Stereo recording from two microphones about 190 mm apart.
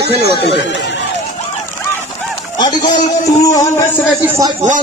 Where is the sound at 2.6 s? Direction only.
20° left (ahead or behind).